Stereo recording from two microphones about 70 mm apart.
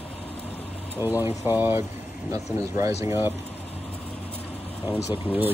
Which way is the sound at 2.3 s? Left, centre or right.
Right.